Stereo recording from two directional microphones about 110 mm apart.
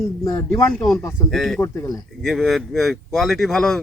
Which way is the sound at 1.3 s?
Centre (ahead or behind).